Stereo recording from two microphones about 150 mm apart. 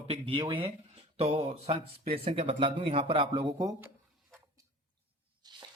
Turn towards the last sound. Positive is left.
turn(degrees=-25)  # may be behind; listen again after turning